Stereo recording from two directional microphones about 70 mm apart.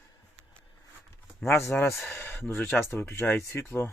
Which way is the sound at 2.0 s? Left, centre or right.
Left.